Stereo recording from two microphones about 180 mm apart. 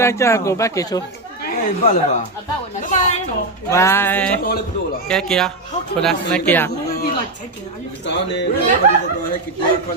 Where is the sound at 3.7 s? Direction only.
15° left (ahead or behind).